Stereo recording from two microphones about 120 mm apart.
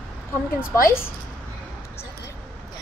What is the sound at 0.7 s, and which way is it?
Speech, 20° left (ahead or behind).